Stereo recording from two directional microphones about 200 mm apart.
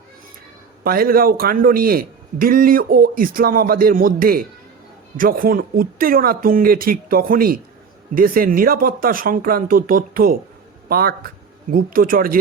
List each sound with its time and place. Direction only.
0.9 s a man's voice: 45° right (ahead or behind)